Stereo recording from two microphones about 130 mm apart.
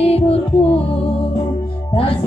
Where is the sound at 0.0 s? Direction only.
50° left (ahead or behind).